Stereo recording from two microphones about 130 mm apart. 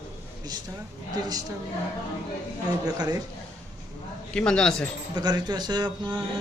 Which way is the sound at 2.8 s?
30° right (ahead or behind).